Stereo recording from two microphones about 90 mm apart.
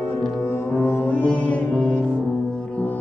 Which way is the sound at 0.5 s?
25° left (ahead or behind).